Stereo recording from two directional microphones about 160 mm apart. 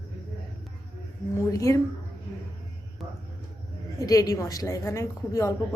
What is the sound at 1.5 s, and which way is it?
Speech, 20° left (ahead or behind).